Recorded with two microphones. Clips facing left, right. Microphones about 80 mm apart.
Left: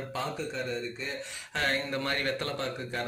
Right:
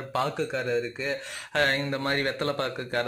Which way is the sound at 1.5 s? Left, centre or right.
Right.